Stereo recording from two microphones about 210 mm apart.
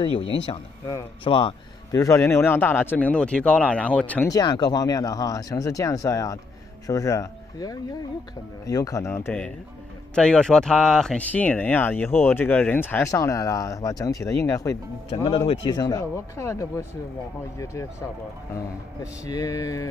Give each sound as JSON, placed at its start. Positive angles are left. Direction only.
{"t": 0.2, "sound": "speech", "side_deg": 60}
{"t": 0.5, "sound": "speech", "side_deg": 20}
{"t": 4.3, "sound": "speech", "side_deg": 20}
{"t": 15.2, "sound": "speech", "side_deg": 25}
{"t": 19.2, "sound": "speech", "side_deg": 15}